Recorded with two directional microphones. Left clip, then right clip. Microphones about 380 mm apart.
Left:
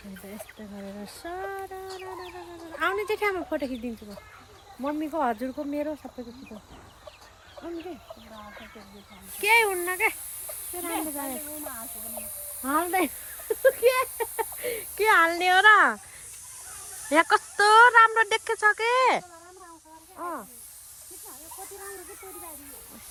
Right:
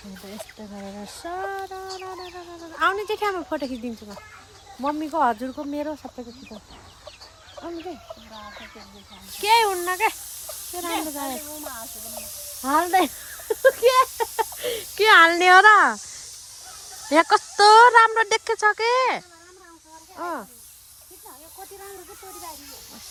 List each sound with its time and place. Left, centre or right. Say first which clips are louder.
1.2 s speech: right 5 dB; centre
4.9 s speech: right 5 dB; centre
8.4 s chicken: right 4 dB; right
9.4 s speech: right 3 dB; centre
11.6 s speech: right 4 dB; right
12.6 s speech: right 6 dB; centre
17.1 s speech: right 4 dB; centre
20.1 s speech: right 4 dB; right